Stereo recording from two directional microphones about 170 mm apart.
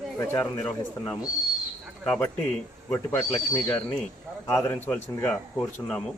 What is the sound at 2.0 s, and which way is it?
Speech, 10° left (ahead or behind).